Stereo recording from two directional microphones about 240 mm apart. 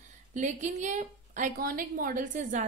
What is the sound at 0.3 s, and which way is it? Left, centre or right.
A woman's voice, right.